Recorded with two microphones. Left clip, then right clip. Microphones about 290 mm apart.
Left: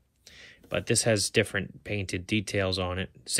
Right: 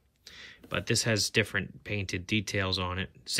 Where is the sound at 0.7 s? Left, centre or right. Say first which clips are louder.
Left 3 dB; centre.